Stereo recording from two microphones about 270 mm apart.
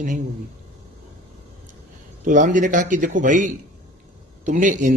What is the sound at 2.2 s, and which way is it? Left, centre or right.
A man's voice, right.